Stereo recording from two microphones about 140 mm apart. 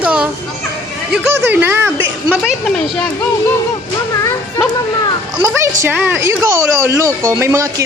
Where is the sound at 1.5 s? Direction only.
15° right (ahead or behind).